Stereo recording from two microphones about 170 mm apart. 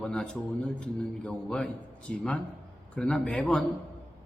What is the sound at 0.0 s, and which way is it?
A man's voice, 5° left (ahead or behind).